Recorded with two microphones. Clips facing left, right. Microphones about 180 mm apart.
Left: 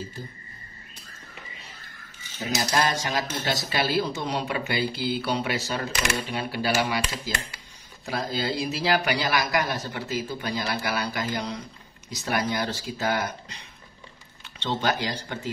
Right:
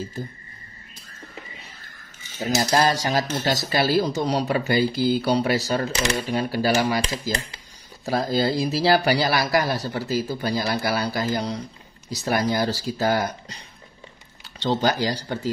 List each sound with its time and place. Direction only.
2.3 s speech: 40° right (ahead or behind)